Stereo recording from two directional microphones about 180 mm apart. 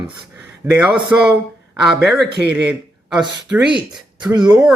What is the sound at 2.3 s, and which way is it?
Speech, 65° right (ahead or behind).